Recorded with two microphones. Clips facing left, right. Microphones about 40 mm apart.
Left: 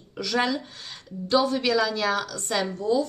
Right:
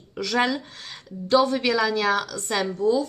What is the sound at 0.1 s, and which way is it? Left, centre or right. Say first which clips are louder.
Speech: right 2 dB; centre.